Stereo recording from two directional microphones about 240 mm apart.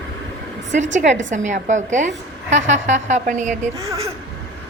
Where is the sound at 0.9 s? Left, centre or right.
Right.